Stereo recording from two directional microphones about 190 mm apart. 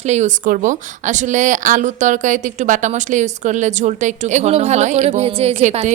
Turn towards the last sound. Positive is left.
turn(degrees=-35)  # may be behind; listen again after turning